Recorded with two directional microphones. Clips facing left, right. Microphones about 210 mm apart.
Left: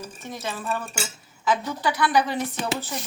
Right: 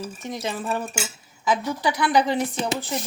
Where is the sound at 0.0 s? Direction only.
15° right (ahead or behind).